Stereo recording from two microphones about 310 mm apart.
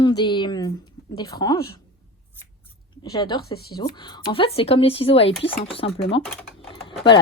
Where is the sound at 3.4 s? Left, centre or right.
Left.